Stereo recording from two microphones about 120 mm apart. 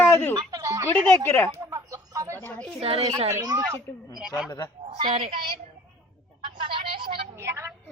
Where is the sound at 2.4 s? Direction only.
15° left (ahead or behind).